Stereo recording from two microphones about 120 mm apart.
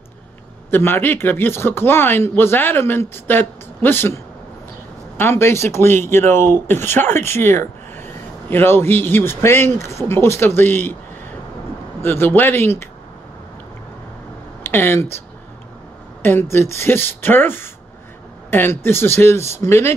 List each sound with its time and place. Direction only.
0.7 s speech: 20° left (ahead or behind)
12.0 s speech: 20° left (ahead or behind)
14.6 s speech: 20° left (ahead or behind)
16.2 s speech: 20° left (ahead or behind)